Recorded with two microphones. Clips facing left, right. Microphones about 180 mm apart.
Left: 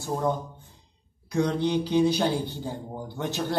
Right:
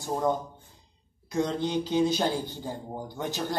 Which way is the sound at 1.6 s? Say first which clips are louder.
Left 3 dB; 45° right (ahead or behind).